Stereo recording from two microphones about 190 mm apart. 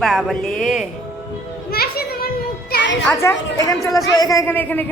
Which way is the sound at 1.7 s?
55° left (ahead or behind).